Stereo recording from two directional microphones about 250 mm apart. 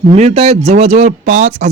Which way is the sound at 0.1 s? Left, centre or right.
Right.